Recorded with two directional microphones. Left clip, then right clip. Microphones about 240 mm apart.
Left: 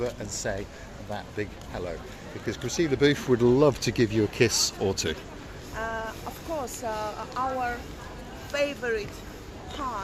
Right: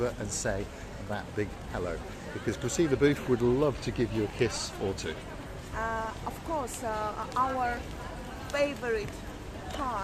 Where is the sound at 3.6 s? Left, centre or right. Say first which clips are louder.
Left 7 dB; left.